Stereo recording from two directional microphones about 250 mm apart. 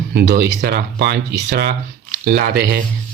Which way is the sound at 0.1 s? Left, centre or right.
Right.